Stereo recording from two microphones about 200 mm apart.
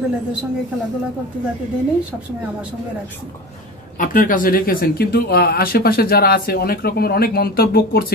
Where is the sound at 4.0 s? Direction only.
45° left (ahead or behind).